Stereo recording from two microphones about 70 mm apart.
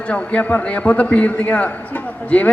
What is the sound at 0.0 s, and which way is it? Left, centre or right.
A man's voice, centre.